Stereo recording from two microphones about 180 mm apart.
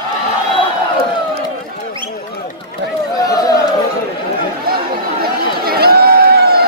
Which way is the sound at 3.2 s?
20° left (ahead or behind).